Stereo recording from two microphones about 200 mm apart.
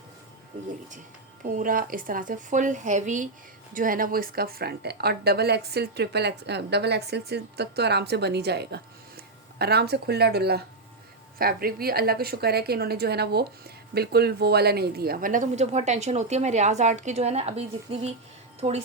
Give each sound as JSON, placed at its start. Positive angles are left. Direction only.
{"t": 1.5, "sound": "a woman's voice", "side_deg": -45}